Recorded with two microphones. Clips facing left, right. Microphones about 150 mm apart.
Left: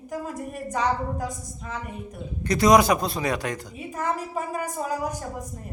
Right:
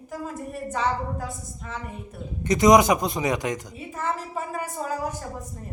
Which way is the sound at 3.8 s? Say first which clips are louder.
Left 1 dB; 15° left (ahead or behind).